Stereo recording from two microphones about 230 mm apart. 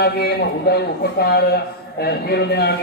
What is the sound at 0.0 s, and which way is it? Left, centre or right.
Speech, left.